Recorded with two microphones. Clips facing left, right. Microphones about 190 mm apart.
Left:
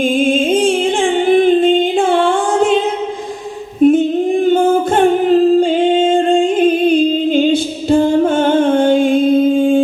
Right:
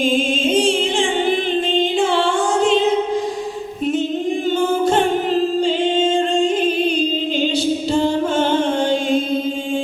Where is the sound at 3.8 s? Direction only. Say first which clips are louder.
Left 11 dB; 50° left (ahead or behind).